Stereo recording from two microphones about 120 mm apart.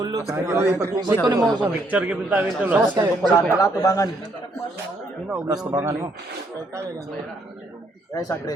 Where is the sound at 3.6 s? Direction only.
25° left (ahead or behind).